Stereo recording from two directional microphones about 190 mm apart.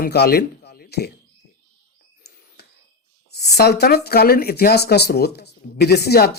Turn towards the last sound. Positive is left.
turn(degrees=55)  # may be behind; listen again after turning